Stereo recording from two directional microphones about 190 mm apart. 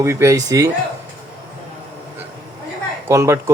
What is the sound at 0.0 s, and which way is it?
Speech, 15° right (ahead or behind).